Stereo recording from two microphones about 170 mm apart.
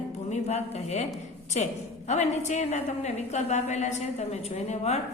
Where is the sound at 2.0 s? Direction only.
45° left (ahead or behind).